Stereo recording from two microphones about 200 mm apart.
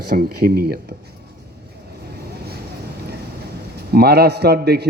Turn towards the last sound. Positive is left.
turn(degrees=-55)  # may be behind; listen again after turning